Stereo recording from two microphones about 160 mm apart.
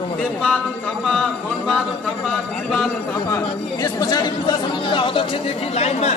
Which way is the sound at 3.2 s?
20° left (ahead or behind).